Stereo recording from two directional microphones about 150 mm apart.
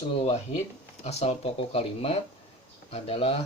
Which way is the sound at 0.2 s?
45° left (ahead or behind).